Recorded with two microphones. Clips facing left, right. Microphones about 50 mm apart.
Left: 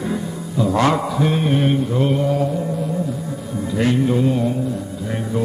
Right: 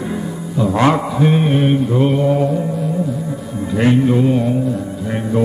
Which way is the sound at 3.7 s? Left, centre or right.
Right.